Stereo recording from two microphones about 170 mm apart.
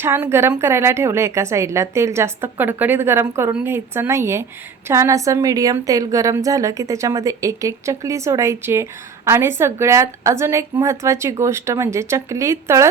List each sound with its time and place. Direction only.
0.0 s a woman's voice: 15° right (ahead or behind)